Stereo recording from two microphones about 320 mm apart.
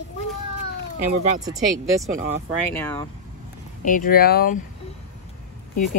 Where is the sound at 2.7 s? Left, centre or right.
Centre.